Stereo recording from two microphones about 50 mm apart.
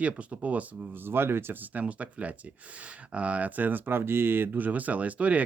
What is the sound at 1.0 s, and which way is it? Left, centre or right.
Speech, right.